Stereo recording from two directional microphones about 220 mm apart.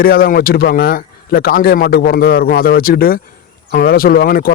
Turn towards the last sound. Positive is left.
turn(degrees=40)  # may be behind; listen again after turning